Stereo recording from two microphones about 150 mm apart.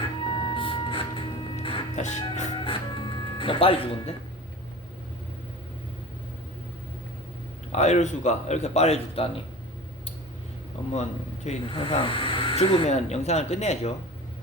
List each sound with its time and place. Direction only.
0.0 s music: 35° left (ahead or behind)
2.0 s speech: 50° left (ahead or behind)
2.6 s music: 35° left (ahead or behind)
7.7 s speech: 50° left (ahead or behind)
11.4 s speech: 35° left (ahead or behind)